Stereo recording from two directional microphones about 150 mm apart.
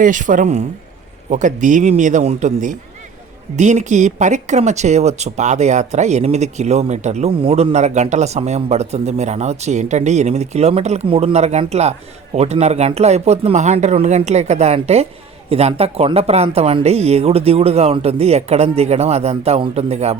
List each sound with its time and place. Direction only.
0.0 s a man's voice: 60° right (ahead or behind)